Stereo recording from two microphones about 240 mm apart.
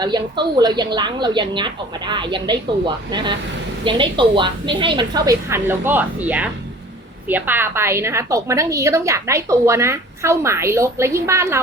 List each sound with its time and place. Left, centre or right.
0.0 s a woman's voice: centre